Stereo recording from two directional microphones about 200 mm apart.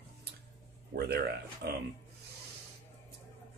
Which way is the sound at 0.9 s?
55° right (ahead or behind).